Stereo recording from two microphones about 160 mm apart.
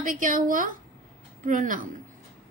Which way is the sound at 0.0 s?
60° right (ahead or behind).